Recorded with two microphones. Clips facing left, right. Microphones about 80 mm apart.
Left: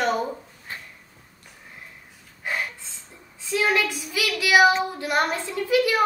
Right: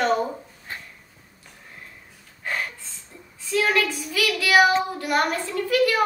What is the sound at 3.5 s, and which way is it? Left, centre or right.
A child's voice, centre.